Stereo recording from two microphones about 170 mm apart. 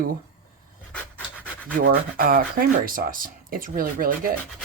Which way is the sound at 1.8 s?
60° right (ahead or behind).